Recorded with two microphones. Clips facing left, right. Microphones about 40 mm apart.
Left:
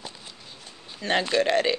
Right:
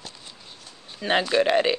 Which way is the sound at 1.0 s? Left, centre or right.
Centre.